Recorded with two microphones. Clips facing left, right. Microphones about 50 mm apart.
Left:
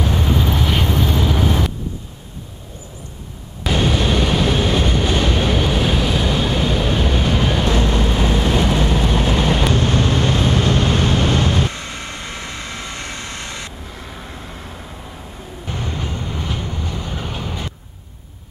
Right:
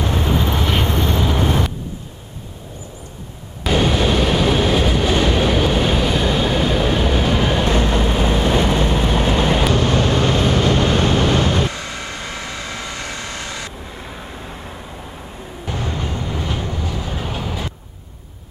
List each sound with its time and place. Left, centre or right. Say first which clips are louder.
0.0 s vehicle: even; centre
3.6 s train: right 2 dB; centre
7.8 s vehicle: right 1 dB; centre
9.8 s vehicle: right 1 dB; right
11.7 s vehicle: right 1 dB; left
15.7 s vehicle: right 2 dB; right
16.1 s train: right 2 dB; centre